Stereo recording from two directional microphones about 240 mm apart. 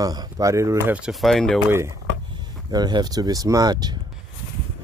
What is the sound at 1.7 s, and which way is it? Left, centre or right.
Speech, centre.